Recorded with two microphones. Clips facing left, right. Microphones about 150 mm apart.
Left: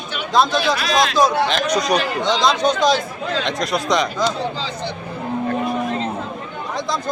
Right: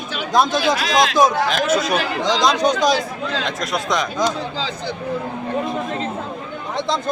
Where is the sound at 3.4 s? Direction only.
Centre (ahead or behind).